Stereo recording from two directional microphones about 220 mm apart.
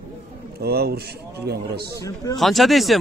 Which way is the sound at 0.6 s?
45° right (ahead or behind).